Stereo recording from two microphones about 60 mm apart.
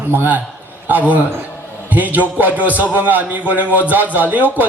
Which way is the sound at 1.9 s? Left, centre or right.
Right.